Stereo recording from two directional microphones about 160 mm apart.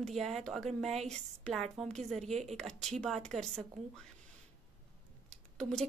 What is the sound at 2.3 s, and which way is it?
Speech, 45° right (ahead or behind).